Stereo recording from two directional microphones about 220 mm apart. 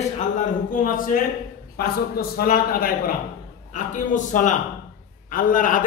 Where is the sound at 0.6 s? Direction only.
40° left (ahead or behind).